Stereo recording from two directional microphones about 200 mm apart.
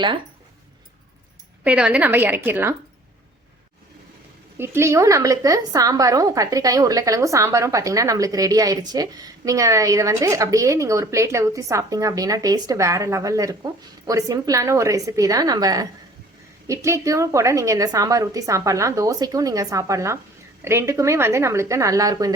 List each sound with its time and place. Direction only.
1.6 s a woman's voice: 5° right (ahead or behind)
4.5 s a woman's voice: 10° right (ahead or behind)